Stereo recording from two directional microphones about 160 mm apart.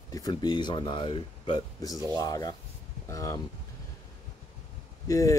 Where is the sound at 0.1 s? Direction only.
25° left (ahead or behind).